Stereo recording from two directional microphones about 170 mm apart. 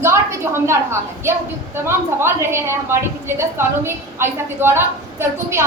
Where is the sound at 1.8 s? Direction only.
15° right (ahead or behind).